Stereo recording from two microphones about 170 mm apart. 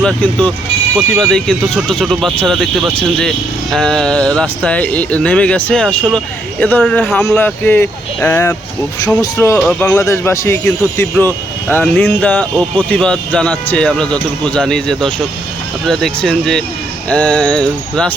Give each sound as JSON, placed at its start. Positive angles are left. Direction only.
{"t": 0.0, "sound": "speech", "side_deg": 5}